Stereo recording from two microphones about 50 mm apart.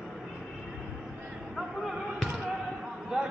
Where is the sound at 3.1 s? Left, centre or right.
Centre.